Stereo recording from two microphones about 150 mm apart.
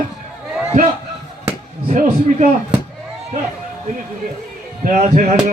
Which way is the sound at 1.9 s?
50° right (ahead or behind).